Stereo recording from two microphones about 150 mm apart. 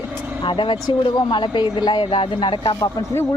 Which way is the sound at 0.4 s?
30° left (ahead or behind).